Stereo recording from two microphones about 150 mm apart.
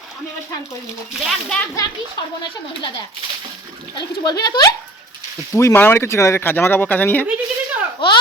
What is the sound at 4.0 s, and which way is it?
Speech, 25° left (ahead or behind).